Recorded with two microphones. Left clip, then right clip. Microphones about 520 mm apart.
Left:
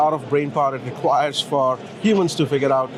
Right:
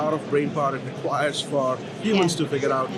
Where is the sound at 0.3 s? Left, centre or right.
Left.